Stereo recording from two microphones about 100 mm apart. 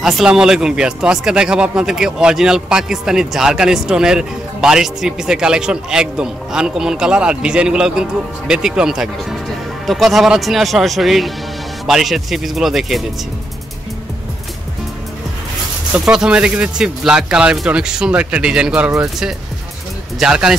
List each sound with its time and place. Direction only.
0.0 s speech: 5° right (ahead or behind)
16.1 s speech: 10° right (ahead or behind)